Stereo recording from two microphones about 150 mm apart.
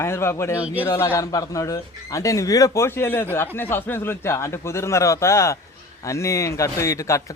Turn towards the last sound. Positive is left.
turn(degrees=20)  # may be behind; listen again after turning